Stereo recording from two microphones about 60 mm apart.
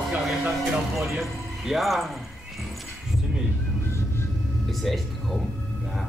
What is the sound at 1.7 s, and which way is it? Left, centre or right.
Speech, centre.